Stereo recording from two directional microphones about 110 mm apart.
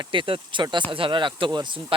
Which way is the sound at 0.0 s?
50° right (ahead or behind).